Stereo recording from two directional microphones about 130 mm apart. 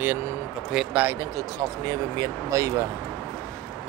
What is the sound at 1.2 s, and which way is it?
Speech, 25° right (ahead or behind).